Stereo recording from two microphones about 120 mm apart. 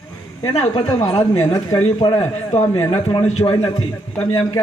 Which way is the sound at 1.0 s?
35° left (ahead or behind).